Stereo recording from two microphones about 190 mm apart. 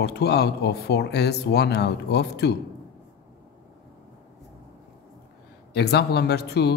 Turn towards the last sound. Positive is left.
turn(degrees=60)  # may be behind; listen again after turning